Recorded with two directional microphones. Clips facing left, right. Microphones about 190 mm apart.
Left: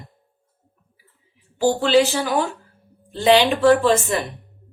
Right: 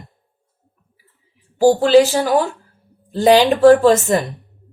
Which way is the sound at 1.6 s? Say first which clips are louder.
Right 6 dB; 40° right (ahead or behind).